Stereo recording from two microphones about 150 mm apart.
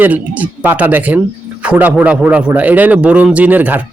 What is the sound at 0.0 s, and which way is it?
A man's voice, 10° right (ahead or behind).